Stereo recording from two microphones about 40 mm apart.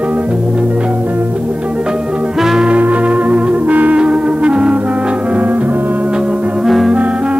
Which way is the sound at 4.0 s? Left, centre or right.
Right.